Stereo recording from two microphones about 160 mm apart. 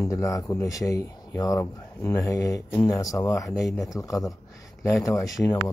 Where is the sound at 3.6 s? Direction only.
Centre (ahead or behind).